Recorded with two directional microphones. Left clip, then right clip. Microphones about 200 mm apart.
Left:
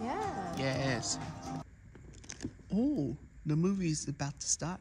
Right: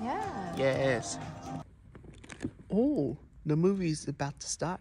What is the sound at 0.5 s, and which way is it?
Speech, 5° left (ahead or behind).